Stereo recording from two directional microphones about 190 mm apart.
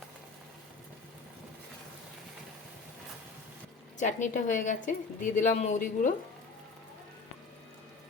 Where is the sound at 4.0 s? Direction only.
40° left (ahead or behind).